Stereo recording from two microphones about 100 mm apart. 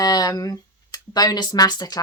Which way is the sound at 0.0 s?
40° left (ahead or behind).